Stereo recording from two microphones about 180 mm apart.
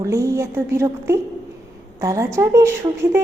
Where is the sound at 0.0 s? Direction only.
15° right (ahead or behind).